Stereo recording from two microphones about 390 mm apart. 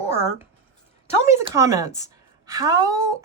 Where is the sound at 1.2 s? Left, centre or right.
Centre.